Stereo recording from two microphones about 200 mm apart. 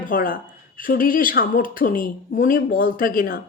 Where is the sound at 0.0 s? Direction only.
45° left (ahead or behind).